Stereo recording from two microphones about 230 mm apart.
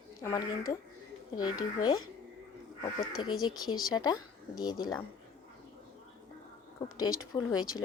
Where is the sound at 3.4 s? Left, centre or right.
Centre.